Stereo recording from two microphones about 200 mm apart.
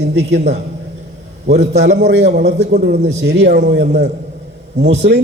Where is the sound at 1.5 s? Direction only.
55° right (ahead or behind).